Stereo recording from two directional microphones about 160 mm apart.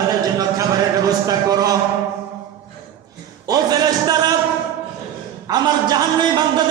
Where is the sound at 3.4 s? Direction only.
25° right (ahead or behind).